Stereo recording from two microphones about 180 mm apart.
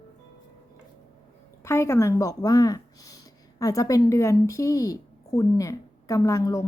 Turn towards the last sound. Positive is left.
turn(degrees=20)  # may be behind; listen again after turning